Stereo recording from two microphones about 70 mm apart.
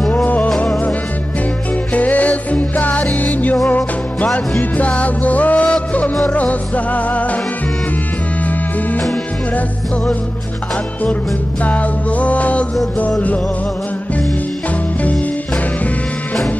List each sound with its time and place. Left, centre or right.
0.1 s music: left
2.0 s music: left
11.6 s music: left